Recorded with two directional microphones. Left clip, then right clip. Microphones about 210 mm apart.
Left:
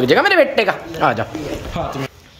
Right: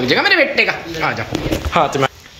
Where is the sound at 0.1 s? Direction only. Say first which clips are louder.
Even; 25° left (ahead or behind).